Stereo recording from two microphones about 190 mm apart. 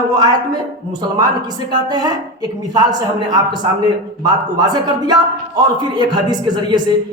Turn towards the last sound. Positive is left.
turn(degrees=-25)  # may be behind; listen again after turning